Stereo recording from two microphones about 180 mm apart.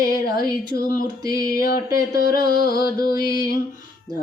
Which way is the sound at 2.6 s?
60° left (ahead or behind).